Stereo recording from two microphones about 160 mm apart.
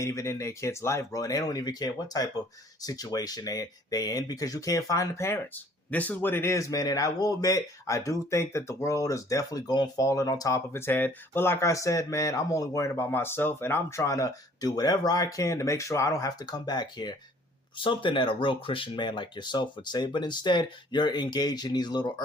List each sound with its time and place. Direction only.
0.0 s speech: 20° left (ahead or behind)